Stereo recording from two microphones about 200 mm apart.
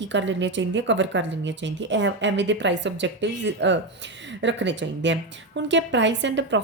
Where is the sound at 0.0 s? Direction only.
65° right (ahead or behind).